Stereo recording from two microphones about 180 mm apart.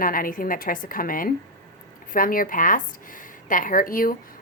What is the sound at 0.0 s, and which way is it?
Speech, 50° left (ahead or behind).